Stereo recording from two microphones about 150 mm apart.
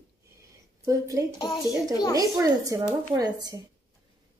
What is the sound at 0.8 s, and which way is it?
A woman's voice, 25° right (ahead or behind).